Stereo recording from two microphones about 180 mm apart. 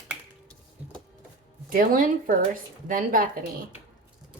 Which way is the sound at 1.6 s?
50° right (ahead or behind).